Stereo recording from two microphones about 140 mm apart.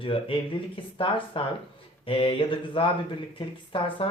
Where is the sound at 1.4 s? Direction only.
40° left (ahead or behind).